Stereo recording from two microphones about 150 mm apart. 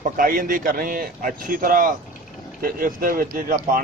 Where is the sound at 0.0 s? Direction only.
70° right (ahead or behind).